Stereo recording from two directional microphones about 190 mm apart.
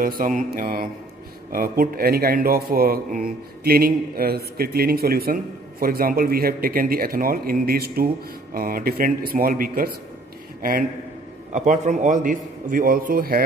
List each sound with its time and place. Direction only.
0.0 s a man's voice: 45° right (ahead or behind)